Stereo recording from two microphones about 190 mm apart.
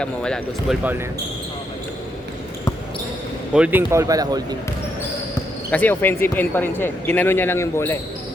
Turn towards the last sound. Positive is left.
turn(degrees=15)  # may be behind; listen again after turning